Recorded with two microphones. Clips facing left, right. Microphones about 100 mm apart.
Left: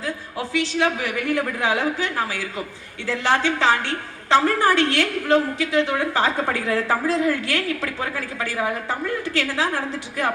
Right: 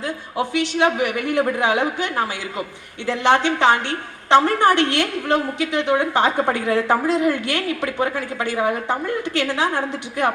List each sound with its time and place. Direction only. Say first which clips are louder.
0.0 s a woman's voice: right 4 dB; 25° right (ahead or behind)